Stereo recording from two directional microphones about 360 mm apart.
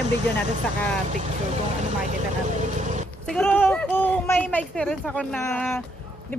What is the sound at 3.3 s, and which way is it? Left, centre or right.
A woman's voice, centre.